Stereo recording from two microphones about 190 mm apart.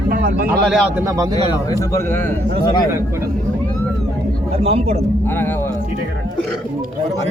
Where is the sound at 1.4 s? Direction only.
15° left (ahead or behind).